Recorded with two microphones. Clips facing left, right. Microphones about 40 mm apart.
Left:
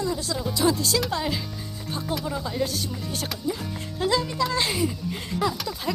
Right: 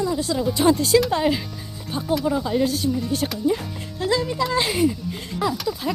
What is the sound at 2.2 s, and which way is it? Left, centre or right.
Speech, centre.